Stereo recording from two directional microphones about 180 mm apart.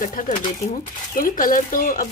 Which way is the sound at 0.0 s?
45° left (ahead or behind).